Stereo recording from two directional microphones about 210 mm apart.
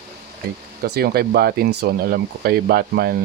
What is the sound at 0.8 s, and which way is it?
Speech, 45° right (ahead or behind).